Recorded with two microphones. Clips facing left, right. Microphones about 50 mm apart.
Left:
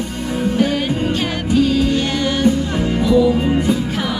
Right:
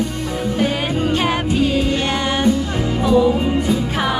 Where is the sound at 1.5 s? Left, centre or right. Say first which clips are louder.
Left 5 dB; right.